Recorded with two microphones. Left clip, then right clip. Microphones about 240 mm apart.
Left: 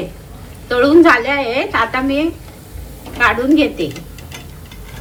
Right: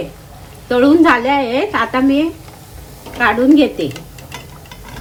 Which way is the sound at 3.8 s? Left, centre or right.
Centre.